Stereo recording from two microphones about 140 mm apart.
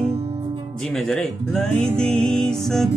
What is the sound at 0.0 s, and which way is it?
Music, 45° right (ahead or behind).